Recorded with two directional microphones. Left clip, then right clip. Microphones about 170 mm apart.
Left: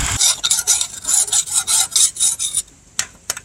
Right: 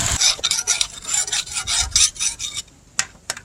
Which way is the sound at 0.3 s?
25° right (ahead or behind).